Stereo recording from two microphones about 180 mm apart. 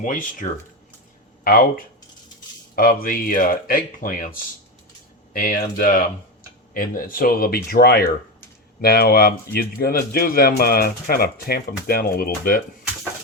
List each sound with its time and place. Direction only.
0.0 s speech: 50° left (ahead or behind)